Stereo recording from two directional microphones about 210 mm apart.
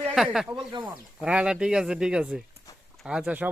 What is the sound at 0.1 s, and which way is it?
Speech, centre (ahead or behind).